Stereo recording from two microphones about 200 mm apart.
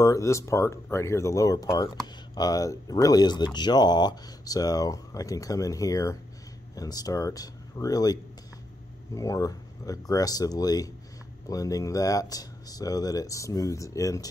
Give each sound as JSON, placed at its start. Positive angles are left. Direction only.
{"t": 0.0, "sound": "speech", "side_deg": 15}